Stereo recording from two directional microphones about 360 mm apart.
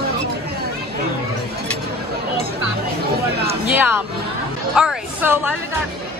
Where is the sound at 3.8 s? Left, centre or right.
Centre.